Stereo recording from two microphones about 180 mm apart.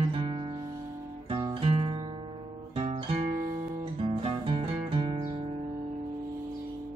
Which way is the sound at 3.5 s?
30° right (ahead or behind).